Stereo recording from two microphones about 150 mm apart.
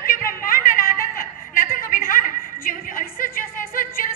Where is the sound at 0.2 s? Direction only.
70° left (ahead or behind).